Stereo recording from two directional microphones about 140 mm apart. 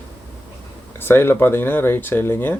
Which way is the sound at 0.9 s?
15° left (ahead or behind).